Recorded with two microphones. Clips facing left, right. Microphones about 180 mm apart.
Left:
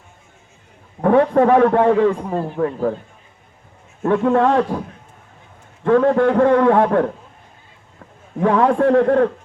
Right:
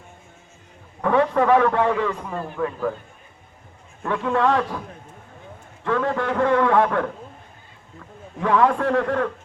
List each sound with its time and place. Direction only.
1.0 s a man's voice: 50° left (ahead or behind)
2.1 s a man's voice: 30° left (ahead or behind)
4.0 s a man's voice: 45° left (ahead or behind)
5.8 s a man's voice: 45° left (ahead or behind)
8.4 s a man's voice: 45° left (ahead or behind)